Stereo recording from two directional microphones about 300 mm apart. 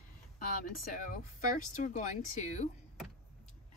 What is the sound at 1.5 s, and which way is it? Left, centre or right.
Speech, left.